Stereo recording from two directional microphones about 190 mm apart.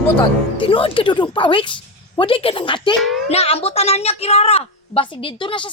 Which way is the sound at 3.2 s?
35° left (ahead or behind).